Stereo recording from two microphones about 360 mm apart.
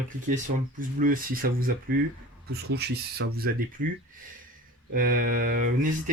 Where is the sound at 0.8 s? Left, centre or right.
Right.